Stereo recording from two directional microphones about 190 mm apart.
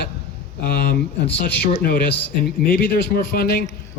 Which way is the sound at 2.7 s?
50° left (ahead or behind).